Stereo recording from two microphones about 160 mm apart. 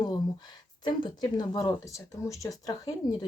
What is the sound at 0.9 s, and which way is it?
Speech, 25° left (ahead or behind).